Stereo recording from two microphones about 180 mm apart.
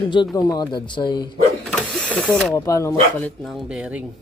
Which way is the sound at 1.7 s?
5° left (ahead or behind).